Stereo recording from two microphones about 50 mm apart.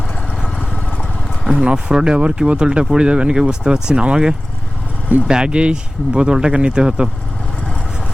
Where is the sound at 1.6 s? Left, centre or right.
Centre.